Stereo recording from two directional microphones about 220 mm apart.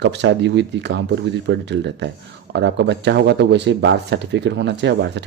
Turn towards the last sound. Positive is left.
turn(degrees=-50)  # may be behind; listen again after turning